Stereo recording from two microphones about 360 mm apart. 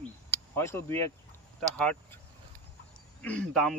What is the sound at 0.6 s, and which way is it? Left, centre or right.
Speech, centre.